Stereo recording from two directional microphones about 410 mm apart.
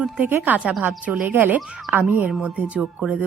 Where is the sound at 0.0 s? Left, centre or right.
Centre.